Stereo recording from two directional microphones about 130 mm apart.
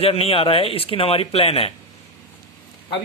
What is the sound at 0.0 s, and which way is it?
A man's voice, 45° left (ahead or behind).